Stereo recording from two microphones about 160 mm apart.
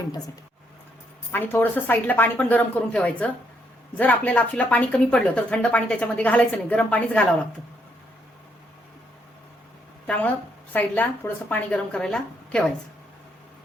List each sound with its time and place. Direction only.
1.3 s a woman's voice: 10° left (ahead or behind)
10.1 s a woman's voice: 10° left (ahead or behind)